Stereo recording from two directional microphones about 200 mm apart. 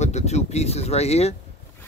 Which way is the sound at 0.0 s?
35° left (ahead or behind).